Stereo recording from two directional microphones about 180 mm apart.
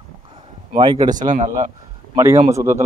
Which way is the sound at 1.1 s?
45° right (ahead or behind).